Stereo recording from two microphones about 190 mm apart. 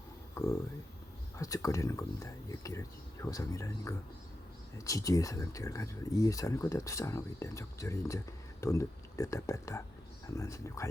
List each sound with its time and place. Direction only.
1.4 s speech: 15° left (ahead or behind)